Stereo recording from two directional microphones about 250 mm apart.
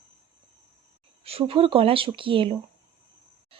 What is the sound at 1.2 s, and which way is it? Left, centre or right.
A woman's voice, right.